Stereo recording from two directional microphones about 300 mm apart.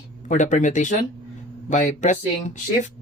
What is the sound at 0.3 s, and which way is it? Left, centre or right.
Speech, left.